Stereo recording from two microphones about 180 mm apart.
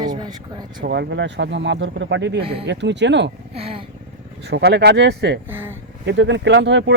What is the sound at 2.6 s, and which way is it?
Speech, 75° right (ahead or behind).